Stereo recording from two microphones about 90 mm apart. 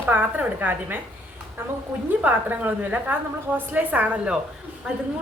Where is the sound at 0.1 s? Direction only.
20° right (ahead or behind).